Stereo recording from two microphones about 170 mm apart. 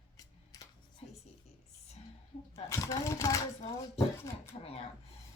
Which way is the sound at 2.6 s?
15° left (ahead or behind).